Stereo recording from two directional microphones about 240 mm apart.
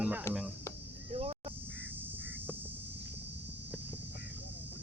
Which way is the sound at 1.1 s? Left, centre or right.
Right.